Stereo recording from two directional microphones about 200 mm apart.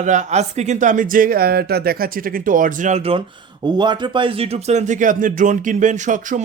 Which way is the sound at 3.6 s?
20° right (ahead or behind).